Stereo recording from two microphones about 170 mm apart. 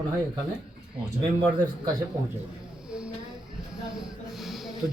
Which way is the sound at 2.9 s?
5° right (ahead or behind).